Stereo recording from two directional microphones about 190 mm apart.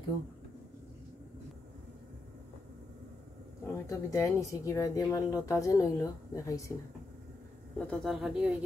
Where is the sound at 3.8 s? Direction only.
15° left (ahead or behind).